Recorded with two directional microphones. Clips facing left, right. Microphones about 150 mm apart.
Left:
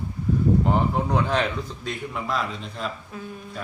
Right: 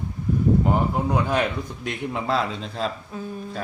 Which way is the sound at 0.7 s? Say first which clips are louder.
Even; 5° right (ahead or behind).